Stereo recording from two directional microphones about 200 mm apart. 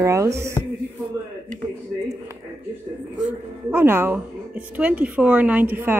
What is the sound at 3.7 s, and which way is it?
A woman's voice, 10° right (ahead or behind).